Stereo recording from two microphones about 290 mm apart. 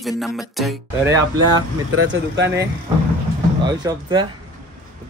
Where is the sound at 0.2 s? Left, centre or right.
Centre.